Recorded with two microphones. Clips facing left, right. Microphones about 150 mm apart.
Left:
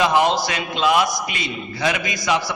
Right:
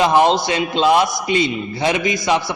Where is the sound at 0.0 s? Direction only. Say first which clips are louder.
Right 3 dB; 25° right (ahead or behind).